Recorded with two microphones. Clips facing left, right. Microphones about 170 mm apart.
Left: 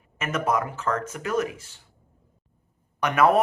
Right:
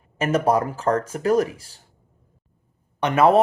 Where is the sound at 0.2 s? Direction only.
35° right (ahead or behind).